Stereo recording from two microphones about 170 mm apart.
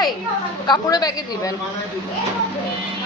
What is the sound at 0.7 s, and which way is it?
Speech, 20° left (ahead or behind).